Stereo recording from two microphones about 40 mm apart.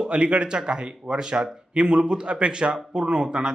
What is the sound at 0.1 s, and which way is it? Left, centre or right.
A man's voice, right.